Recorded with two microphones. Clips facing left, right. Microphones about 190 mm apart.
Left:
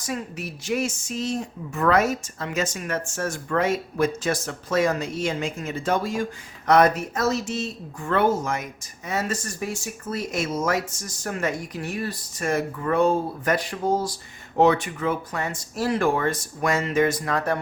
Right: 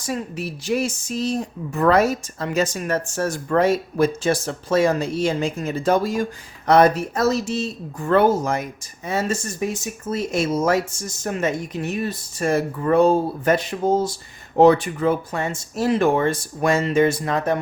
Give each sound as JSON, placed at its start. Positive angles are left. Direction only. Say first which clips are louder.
{"t": 0.0, "sound": "speech", "louder": "right 4 dB", "side_deg": -30}
{"t": 14.5, "sound": "speech", "louder": "right 5 dB", "side_deg": -35}